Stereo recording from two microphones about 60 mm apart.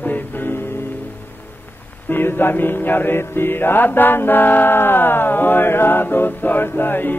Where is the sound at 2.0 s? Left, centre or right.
Left.